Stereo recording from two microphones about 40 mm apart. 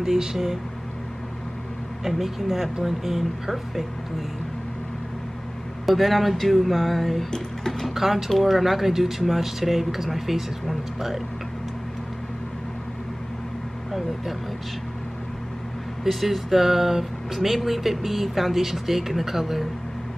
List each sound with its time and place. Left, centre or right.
0.0 s speech: centre
2.0 s speech: centre
5.9 s speech: centre
7.2 s speech: centre
7.8 s speech: centre
16.0 s speech: centre